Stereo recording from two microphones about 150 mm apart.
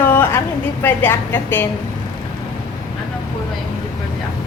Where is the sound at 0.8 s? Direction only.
15° left (ahead or behind).